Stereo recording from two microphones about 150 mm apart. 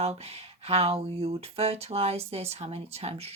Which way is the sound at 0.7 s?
40° right (ahead or behind).